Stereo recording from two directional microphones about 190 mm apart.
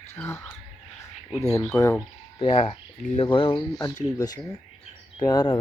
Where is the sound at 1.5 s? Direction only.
15° left (ahead or behind).